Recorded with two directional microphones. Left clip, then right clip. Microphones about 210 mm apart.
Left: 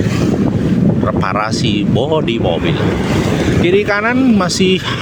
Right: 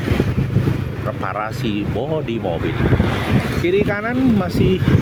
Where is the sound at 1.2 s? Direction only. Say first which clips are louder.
Left 7 dB; 25° left (ahead or behind).